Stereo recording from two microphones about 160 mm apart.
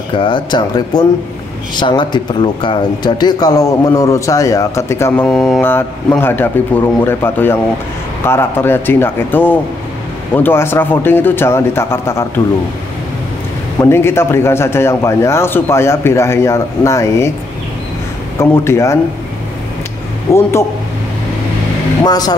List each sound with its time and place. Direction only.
0.1 s a man's voice: 30° left (ahead or behind)
13.7 s a man's voice: 15° left (ahead or behind)
18.4 s a man's voice: 15° left (ahead or behind)
20.3 s a man's voice: 15° left (ahead or behind)
22.0 s speech: 25° left (ahead or behind)